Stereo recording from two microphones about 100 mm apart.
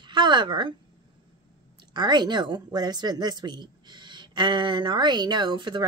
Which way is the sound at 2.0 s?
50° right (ahead or behind).